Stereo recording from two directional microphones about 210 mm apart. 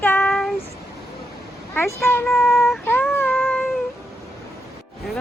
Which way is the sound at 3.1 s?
10° left (ahead or behind).